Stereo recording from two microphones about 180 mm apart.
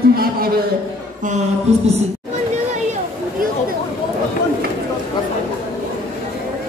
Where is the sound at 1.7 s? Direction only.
40° right (ahead or behind).